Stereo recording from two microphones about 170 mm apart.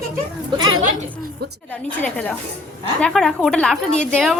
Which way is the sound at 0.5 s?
25° right (ahead or behind).